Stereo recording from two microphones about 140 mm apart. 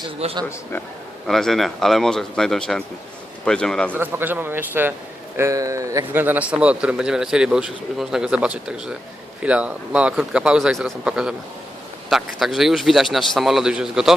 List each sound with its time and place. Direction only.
0.2 s a man's voice: 50° right (ahead or behind)
1.3 s a man's voice: centre (ahead or behind)
3.9 s a man's voice: 15° right (ahead or behind)